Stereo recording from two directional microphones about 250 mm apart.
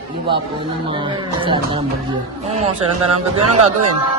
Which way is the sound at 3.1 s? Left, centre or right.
Right.